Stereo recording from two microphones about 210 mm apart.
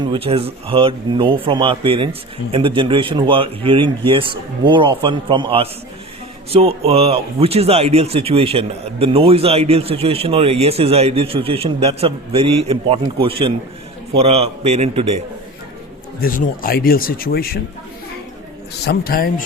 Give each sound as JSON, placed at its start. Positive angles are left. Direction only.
{"t": 0.0, "sound": "speech", "side_deg": -25}
{"t": 16.2, "sound": "speech", "side_deg": 40}
{"t": 18.9, "sound": "speech", "side_deg": 45}